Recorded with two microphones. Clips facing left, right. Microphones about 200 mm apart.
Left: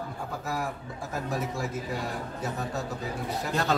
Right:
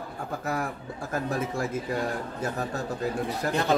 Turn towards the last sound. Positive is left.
turn(degrees=-15)  # may be behind; listen again after turning